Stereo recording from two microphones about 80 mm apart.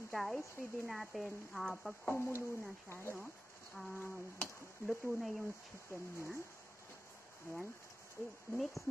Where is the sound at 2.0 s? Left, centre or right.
Left.